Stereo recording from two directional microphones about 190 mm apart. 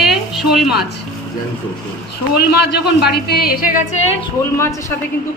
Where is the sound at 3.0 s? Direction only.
55° left (ahead or behind).